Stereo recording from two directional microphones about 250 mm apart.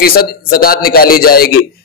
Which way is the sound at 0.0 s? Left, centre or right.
Left.